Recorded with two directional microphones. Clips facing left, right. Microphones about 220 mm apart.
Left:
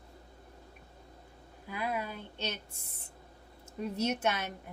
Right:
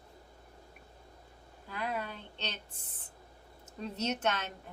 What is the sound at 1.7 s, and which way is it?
Speech, 10° left (ahead or behind).